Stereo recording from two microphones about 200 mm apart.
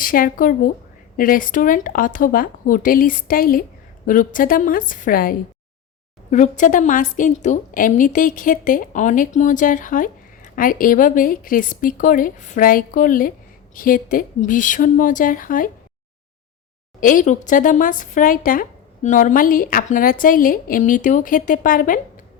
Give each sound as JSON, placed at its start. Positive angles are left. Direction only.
{"t": 0.0, "sound": "a woman's voice", "side_deg": 45}
{"t": 17.0, "sound": "speech", "side_deg": 40}